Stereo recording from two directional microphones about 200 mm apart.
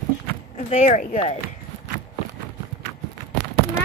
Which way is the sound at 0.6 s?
35° left (ahead or behind).